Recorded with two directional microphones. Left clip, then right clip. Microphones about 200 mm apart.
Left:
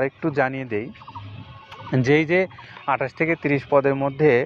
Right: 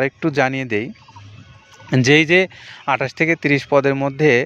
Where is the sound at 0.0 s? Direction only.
50° right (ahead or behind).